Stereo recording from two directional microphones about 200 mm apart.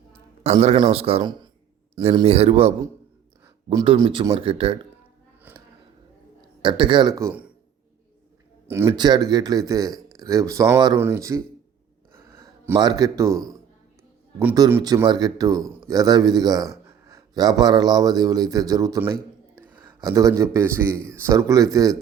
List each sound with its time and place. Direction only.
0.4 s speech: 30° right (ahead or behind)
3.4 s speech: 15° right (ahead or behind)
5.4 s a sound: 10° right (ahead or behind)
6.6 s speech: 25° right (ahead or behind)
8.6 s speech: 10° right (ahead or behind)
12.1 s gasp: 15° right (ahead or behind)
14.3 s a man's voice: 15° right (ahead or behind)